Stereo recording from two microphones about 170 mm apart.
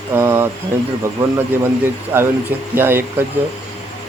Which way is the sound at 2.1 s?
10° right (ahead or behind).